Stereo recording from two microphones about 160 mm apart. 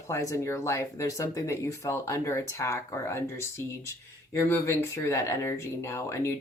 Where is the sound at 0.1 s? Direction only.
20° left (ahead or behind).